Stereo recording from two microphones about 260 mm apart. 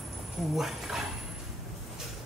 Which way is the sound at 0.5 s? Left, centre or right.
Centre.